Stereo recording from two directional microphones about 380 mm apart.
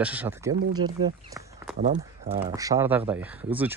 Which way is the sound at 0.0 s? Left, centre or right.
Centre.